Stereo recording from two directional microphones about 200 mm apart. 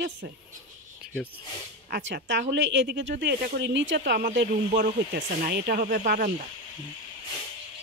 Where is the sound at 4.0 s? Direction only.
45° right (ahead or behind).